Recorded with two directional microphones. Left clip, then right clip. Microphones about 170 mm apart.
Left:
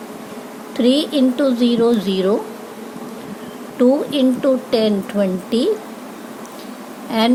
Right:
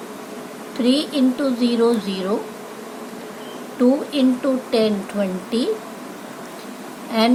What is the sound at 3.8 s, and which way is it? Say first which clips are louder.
A woman's voice: left 3 dB; 50° left (ahead or behind).